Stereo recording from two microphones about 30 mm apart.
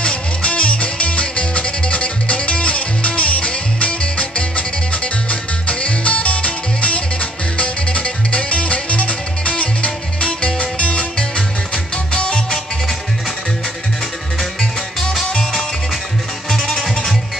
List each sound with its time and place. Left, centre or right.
0.0 s music: left
11.1 s music: left
16.4 s music: centre